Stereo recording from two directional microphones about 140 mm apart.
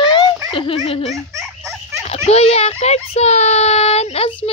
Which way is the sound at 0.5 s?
40° left (ahead or behind).